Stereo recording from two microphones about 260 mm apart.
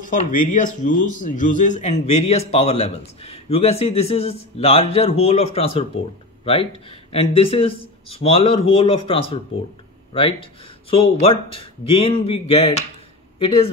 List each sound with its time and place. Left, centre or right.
0.0 s a man's voice: left
10.9 s a man's voice: left